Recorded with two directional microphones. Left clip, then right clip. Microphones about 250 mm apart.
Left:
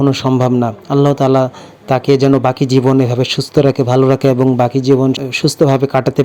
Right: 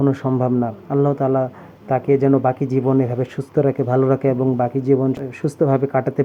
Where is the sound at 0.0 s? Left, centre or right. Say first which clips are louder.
Left 6 dB; left.